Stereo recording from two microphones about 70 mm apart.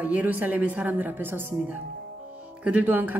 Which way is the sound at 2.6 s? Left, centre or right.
Centre.